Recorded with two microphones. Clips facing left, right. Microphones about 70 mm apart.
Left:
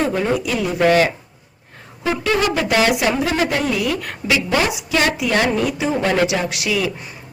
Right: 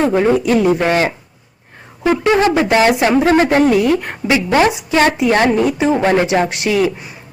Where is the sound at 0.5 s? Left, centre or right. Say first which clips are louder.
Right 9 dB; right.